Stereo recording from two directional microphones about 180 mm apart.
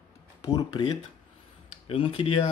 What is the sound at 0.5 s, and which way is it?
Speech, 25° left (ahead or behind).